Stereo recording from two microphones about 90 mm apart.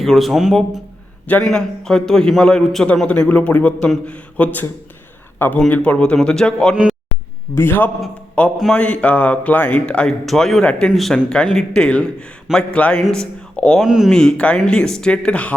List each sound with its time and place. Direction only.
0.0 s a man's voice: centre (ahead or behind)
7.5 s a man's voice: 25° left (ahead or behind); by 13.8 s 10° left (ahead or behind)
13.8 s speech: 5° right (ahead or behind)
14.1 s a man's voice: 10° left (ahead or behind)